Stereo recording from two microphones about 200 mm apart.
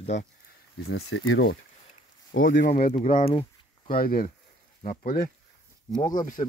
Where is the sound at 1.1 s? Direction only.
75° left (ahead or behind).